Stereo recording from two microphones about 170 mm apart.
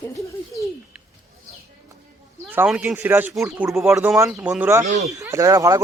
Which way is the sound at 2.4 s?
10° right (ahead or behind).